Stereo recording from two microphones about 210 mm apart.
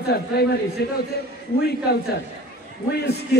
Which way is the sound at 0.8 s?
50° left (ahead or behind).